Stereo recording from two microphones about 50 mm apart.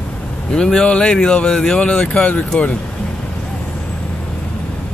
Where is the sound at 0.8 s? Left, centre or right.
Left.